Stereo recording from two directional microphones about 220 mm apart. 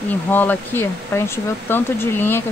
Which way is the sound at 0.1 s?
10° left (ahead or behind).